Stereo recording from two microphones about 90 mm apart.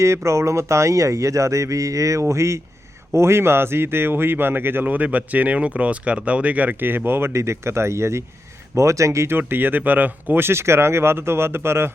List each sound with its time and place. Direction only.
0.0 s speech: 30° right (ahead or behind)